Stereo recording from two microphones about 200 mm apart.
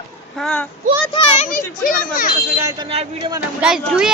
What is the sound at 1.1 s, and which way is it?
A child's voice, 30° left (ahead or behind).